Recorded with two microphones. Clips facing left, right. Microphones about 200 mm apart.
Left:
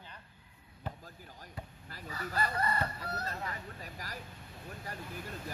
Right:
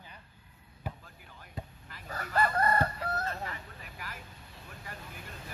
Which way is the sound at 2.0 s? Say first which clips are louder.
Right 5 dB; 50° right (ahead or behind).